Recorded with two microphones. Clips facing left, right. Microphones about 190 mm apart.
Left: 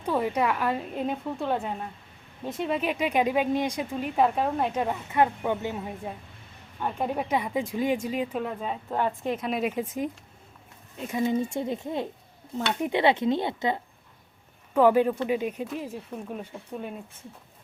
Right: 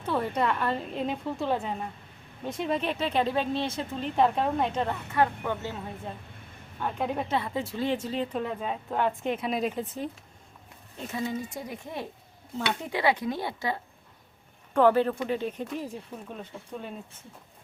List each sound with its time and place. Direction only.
0.0 s speech: 10° left (ahead or behind)
11.2 s speech: 25° left (ahead or behind)
14.7 s speech: 10° left (ahead or behind)